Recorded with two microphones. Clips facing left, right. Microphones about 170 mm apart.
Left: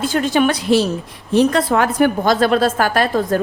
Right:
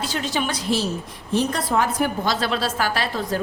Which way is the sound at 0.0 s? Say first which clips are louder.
Left 9 dB; 50° left (ahead or behind).